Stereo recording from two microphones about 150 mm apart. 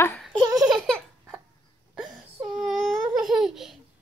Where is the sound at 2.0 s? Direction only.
5° right (ahead or behind).